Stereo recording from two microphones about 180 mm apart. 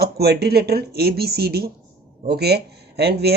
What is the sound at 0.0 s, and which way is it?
Speech, 60° right (ahead or behind).